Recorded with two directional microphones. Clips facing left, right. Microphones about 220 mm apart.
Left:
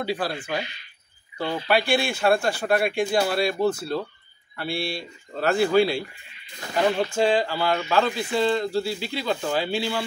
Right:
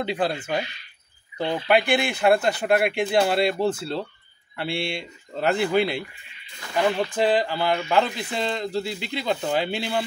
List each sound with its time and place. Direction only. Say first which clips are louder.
0.0 s speech: right 2 dB; 20° right (ahead or behind)
7.2 s speech: even; 20° right (ahead or behind)